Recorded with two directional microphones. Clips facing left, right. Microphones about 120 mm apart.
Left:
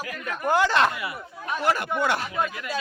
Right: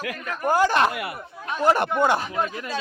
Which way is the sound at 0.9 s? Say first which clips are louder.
Right 2 dB; 55° right (ahead or behind).